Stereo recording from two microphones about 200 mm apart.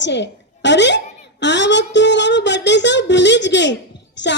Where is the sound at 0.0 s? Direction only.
60° left (ahead or behind).